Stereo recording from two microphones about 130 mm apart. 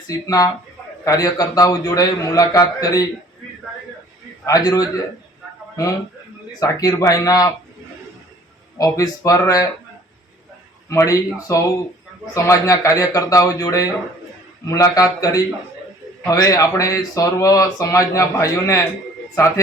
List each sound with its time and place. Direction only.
0.1 s speech: 30° left (ahead or behind)
4.4 s speech: 25° left (ahead or behind)
6.5 s speech: 30° left (ahead or behind)
8.8 s speech: 25° left (ahead or behind)
10.8 s speech: 25° left (ahead or behind)